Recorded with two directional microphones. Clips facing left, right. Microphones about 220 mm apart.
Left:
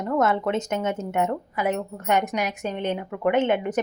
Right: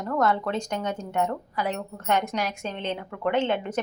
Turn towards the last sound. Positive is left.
turn(degrees=15)  # may be behind; listen again after turning